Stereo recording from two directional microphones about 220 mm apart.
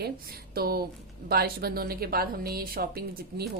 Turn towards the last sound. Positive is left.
turn(degrees=-45)  # may be behind; listen again after turning